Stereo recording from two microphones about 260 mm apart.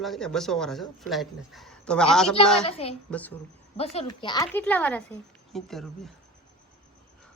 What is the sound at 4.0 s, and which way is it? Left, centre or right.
A woman's voice, centre.